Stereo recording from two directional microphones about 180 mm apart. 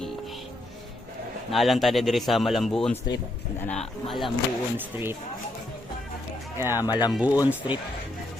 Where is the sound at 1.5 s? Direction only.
Centre (ahead or behind).